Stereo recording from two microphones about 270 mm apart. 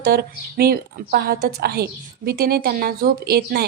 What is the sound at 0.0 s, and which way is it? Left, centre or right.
A woman's voice, right.